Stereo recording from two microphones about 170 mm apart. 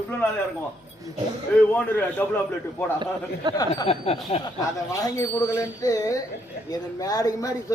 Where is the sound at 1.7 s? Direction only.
10° left (ahead or behind).